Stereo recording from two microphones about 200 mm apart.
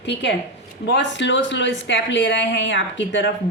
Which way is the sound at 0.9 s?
65° left (ahead or behind).